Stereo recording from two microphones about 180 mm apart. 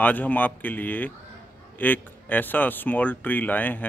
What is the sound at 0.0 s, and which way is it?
Speech, 10° left (ahead or behind).